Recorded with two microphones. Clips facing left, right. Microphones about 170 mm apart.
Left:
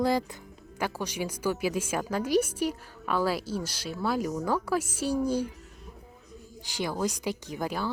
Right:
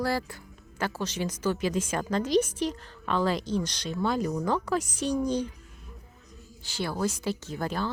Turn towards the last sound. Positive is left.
turn(degrees=10)  # may be behind; listen again after turning